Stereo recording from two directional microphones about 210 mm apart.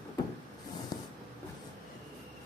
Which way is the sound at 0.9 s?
20° left (ahead or behind).